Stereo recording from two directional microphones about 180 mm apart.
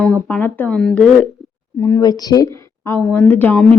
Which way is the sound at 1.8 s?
15° left (ahead or behind).